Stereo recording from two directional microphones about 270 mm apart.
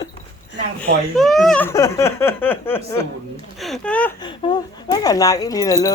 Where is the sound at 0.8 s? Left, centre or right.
Centre.